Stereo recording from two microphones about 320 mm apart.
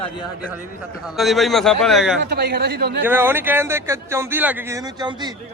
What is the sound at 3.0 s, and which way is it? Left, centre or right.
A man's voice, centre.